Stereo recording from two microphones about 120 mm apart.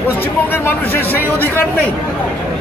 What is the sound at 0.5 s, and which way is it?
Speech, 20° left (ahead or behind).